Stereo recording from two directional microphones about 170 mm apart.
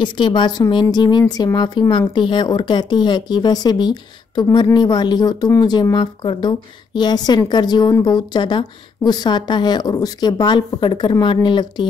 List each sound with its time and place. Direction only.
0.0 s a woman's voice: 25° left (ahead or behind)